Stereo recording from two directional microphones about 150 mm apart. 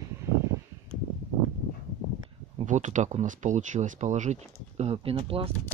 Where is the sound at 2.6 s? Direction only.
55° right (ahead or behind); by 5.5 s 40° right (ahead or behind).